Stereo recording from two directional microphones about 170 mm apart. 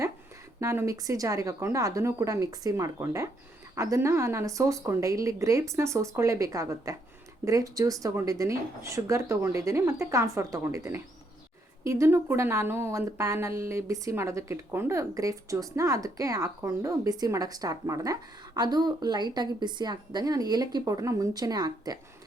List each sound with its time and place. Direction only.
0.6 s speech: 15° right (ahead or behind)